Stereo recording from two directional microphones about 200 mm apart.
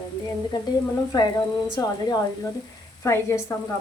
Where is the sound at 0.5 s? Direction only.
20° left (ahead or behind).